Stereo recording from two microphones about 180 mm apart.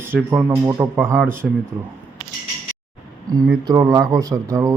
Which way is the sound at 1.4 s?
Centre (ahead or behind).